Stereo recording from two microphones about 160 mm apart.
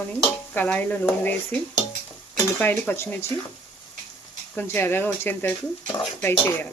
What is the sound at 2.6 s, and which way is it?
Speech, 10° left (ahead or behind).